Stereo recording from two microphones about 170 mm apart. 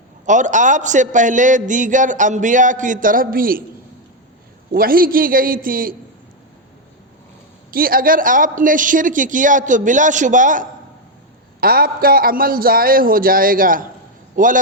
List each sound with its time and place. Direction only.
0.3 s a man's voice: 45° right (ahead or behind)
4.7 s a man's voice: 60° right (ahead or behind)
7.7 s a man's voice: 60° right (ahead or behind)
11.6 s a man's voice: 60° right (ahead or behind)